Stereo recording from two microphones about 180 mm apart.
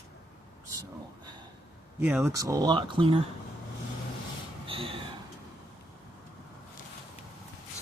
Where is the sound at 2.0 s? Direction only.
10° right (ahead or behind); by 3.2 s 30° right (ahead or behind).